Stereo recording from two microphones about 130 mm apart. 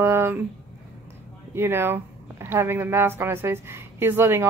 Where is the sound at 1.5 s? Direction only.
20° right (ahead or behind).